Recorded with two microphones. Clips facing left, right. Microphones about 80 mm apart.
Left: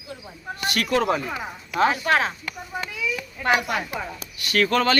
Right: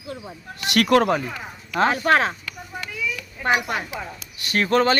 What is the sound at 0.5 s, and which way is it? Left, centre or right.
Speech, right.